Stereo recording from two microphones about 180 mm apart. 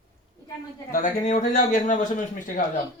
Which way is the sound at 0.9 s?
45° left (ahead or behind).